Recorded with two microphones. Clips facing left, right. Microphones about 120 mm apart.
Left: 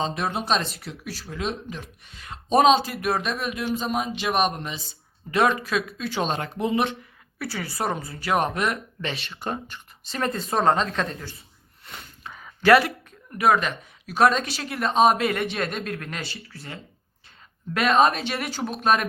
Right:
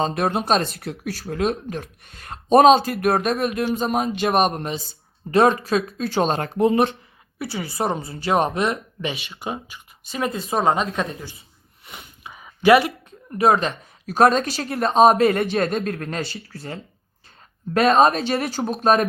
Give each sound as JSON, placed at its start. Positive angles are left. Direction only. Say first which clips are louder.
{"t": 0.0, "sound": "speech", "louder": "right 5 dB", "side_deg": -50}
{"t": 7.3, "sound": "speech", "louder": "right 3 dB", "side_deg": -25}
{"t": 11.9, "sound": "a sound", "louder": "even", "side_deg": -20}
{"t": 13.1, "sound": "speech", "louder": "right 4 dB", "side_deg": -30}
{"t": 17.7, "sound": "speech", "louder": "right 4 dB", "side_deg": -35}